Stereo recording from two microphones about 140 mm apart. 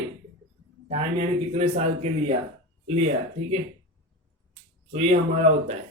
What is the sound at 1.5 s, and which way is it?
Speech, 50° right (ahead or behind).